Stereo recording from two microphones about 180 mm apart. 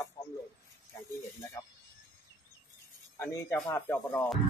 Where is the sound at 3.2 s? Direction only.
15° left (ahead or behind).